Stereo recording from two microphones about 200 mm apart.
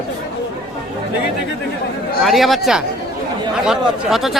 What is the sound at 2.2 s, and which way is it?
Speech, centre (ahead or behind).